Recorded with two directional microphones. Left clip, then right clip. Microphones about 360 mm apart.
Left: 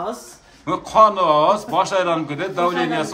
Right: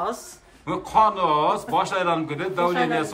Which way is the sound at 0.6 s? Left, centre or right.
Centre.